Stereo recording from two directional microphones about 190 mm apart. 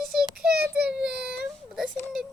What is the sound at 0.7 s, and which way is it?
Child singing, 5° right (ahead or behind).